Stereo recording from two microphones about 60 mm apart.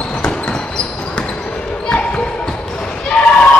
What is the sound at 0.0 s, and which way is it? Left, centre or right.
Basketball bounce, centre.